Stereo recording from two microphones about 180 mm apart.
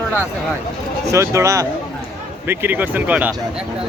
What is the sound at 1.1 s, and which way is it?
Speech, 15° right (ahead or behind).